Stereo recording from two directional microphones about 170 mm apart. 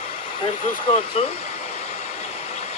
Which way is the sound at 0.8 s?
35° left (ahead or behind).